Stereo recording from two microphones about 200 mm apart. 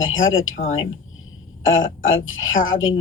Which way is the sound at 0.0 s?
75° left (ahead or behind).